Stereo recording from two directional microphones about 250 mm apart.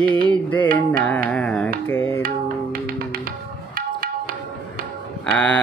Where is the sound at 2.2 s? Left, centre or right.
Right.